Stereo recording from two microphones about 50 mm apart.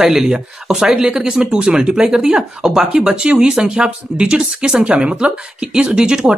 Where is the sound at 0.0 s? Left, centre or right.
Centre.